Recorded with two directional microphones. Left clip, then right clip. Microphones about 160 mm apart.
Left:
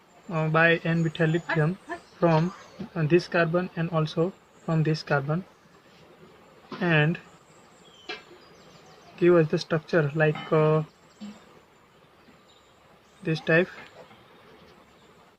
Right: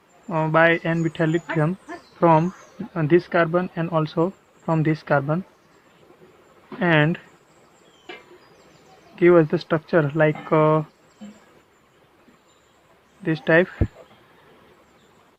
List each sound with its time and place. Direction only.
0.3 s speech: 65° right (ahead or behind)
2.9 s speech: 65° right (ahead or behind)
6.7 s speech: 70° right (ahead or behind)
9.1 s speech: 65° right (ahead or behind)
13.2 s speech: 60° right (ahead or behind)